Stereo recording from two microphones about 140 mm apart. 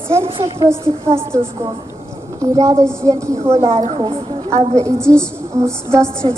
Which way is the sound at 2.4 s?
25° right (ahead or behind).